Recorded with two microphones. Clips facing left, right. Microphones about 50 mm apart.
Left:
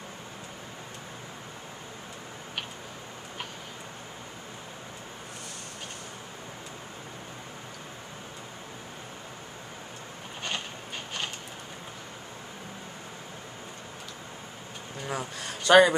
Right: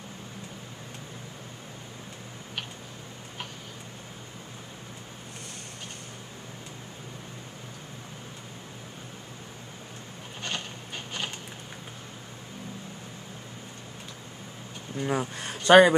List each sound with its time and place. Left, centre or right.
15.0 s speech: centre
15.3 s speech: right